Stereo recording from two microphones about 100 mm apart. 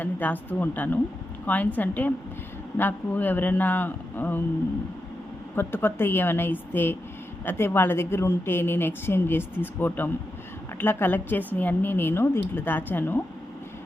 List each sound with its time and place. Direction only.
0.0 s a woman's voice: 15° left (ahead or behind)
5.5 s a woman's voice: 20° left (ahead or behind)